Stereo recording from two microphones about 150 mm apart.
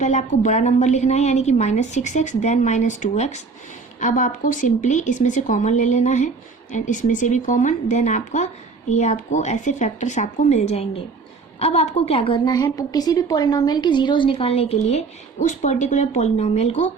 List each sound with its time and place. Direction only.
0.0 s a woman's voice: 55° left (ahead or behind)